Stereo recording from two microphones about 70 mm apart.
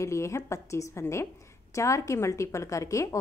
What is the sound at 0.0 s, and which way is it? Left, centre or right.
A woman's voice, left.